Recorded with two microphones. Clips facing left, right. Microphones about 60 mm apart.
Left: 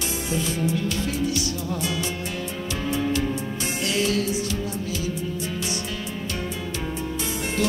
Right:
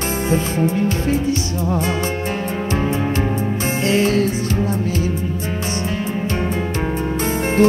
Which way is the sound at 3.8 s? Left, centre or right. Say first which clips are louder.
Right 7 dB; right.